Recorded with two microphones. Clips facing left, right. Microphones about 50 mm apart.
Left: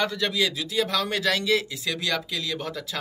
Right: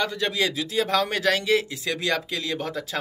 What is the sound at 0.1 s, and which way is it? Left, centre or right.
A man's voice, right.